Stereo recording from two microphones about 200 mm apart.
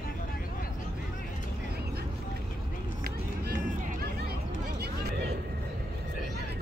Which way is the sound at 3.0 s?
50° right (ahead or behind).